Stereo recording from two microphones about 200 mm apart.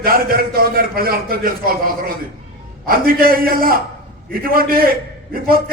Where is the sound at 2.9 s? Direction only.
45° right (ahead or behind).